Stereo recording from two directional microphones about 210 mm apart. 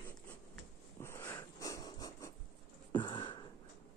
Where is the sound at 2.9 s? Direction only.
25° left (ahead or behind).